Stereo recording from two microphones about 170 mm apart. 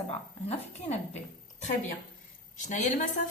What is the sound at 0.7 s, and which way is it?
Speech, 40° left (ahead or behind).